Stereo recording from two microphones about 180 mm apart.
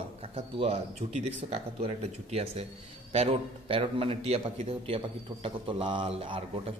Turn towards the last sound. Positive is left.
turn(degrees=-30)  # may be behind; listen again after turning